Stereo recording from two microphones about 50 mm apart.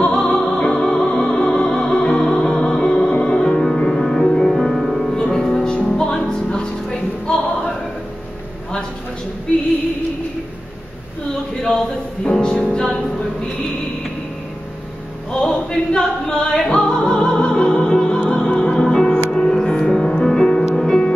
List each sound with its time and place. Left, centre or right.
0.0 s music: centre
12.3 s music: centre
15.4 s choir: centre
16.3 s music: centre